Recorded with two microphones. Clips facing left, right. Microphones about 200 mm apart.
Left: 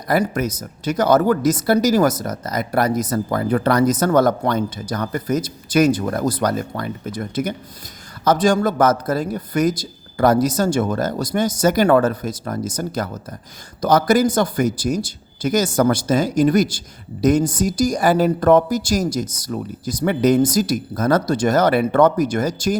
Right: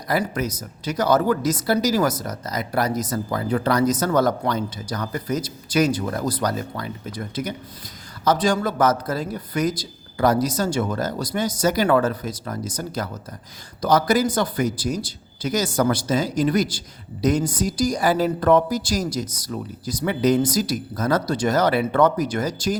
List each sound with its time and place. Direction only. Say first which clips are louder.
0.1 s speech: left 4 dB; 50° left (ahead or behind)